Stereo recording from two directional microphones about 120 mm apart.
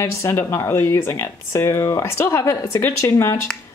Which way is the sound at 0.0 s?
20° left (ahead or behind).